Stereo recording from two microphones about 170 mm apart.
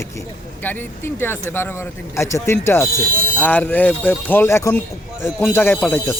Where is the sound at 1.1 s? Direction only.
10° left (ahead or behind).